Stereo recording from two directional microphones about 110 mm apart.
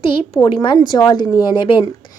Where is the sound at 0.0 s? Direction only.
50° left (ahead or behind).